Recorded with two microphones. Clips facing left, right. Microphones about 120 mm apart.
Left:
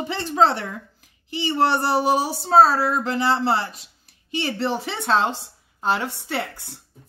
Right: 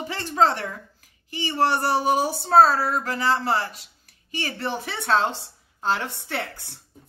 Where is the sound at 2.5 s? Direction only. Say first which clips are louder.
Left 1 dB; 5° left (ahead or behind).